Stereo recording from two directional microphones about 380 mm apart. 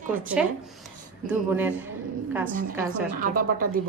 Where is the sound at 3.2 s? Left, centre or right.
Right.